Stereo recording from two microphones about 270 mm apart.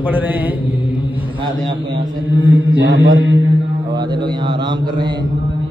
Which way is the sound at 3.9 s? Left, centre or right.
Centre.